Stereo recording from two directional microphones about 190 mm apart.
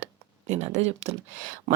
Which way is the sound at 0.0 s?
40° right (ahead or behind).